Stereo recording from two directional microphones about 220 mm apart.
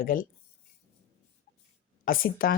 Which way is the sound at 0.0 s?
40° left (ahead or behind).